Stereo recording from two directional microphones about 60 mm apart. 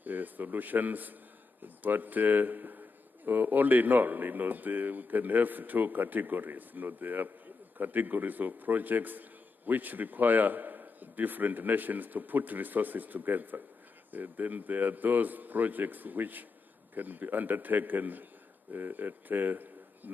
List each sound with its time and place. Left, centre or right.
0.0 s a man's voice: right